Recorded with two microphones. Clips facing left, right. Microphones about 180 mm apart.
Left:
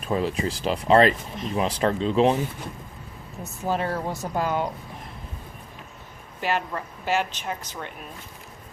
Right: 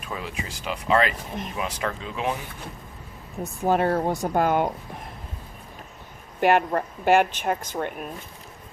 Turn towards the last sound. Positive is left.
turn(degrees=-50)  # may be behind; listen again after turning